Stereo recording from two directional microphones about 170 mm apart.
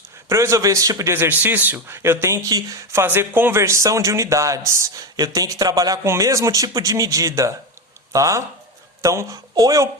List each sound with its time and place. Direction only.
0.3 s a man's voice: 15° right (ahead or behind)